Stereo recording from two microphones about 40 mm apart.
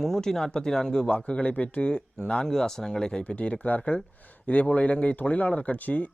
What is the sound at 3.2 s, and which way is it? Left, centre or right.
Speech, left.